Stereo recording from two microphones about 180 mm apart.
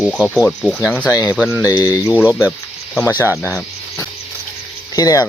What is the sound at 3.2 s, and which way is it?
Speech, 15° left (ahead or behind).